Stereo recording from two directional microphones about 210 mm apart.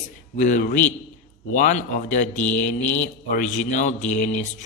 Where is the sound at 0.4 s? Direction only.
35° left (ahead or behind).